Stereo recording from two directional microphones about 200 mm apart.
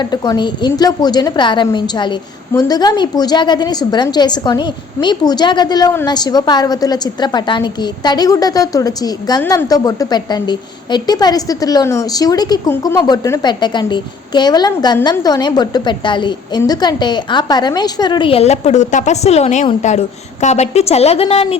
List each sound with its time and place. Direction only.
0.0 s a woman's voice: 20° left (ahead or behind)